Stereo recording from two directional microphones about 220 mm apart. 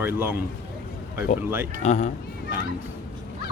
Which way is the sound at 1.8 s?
30° left (ahead or behind).